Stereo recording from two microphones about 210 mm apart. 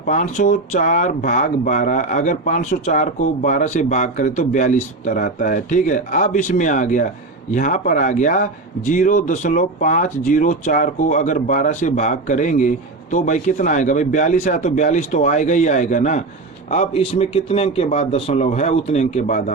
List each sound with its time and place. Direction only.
0.0 s a man's voice: 40° left (ahead or behind)